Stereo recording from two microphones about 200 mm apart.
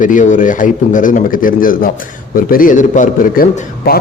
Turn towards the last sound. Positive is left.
turn(degrees=50)  # may be behind; listen again after turning